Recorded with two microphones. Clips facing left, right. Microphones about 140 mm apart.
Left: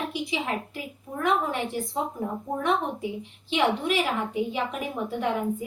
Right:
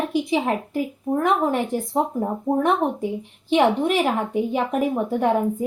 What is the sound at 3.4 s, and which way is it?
A woman's voice, 45° right (ahead or behind).